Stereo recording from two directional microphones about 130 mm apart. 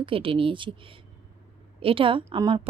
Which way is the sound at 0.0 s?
40° right (ahead or behind).